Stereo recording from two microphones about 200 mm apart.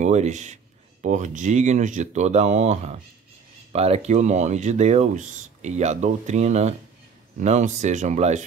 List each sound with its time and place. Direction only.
0.0 s speech: 35° right (ahead or behind)